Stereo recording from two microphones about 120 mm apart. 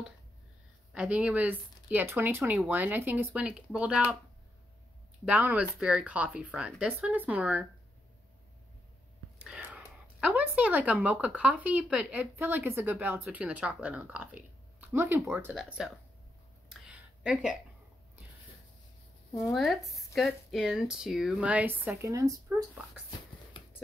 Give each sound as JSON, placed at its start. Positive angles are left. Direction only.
{"t": 0.9, "sound": "speech", "side_deg": -10}
{"t": 5.2, "sound": "speech", "side_deg": -15}
{"t": 9.5, "sound": "speech", "side_deg": -10}
{"t": 15.8, "sound": "speech", "side_deg": -5}
{"t": 16.6, "sound": "a sound", "side_deg": -10}
{"t": 19.3, "sound": "speech", "side_deg": 0}
{"t": 22.0, "sound": "speech", "side_deg": -25}